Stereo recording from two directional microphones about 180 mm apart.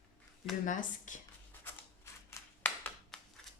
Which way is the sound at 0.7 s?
45° left (ahead or behind).